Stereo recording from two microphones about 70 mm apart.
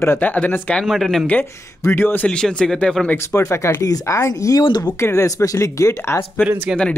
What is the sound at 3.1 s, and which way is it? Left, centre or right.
Speech, left.